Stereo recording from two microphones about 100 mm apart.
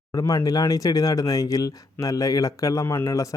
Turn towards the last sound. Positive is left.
turn(degrees=30)  # may be behind; listen again after turning